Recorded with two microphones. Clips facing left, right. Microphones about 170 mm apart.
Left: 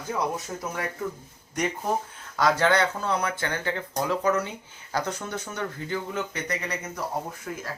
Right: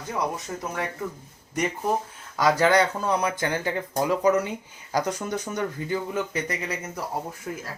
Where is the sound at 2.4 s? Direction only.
10° right (ahead or behind).